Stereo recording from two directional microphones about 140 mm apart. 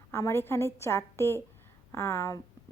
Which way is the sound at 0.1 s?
20° left (ahead or behind).